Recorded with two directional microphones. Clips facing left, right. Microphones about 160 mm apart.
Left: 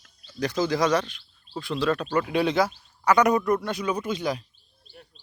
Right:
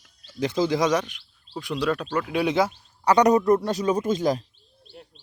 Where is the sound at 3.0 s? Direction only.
35° right (ahead or behind).